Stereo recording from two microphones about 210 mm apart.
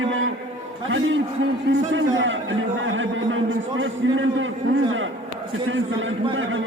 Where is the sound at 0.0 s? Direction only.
70° right (ahead or behind).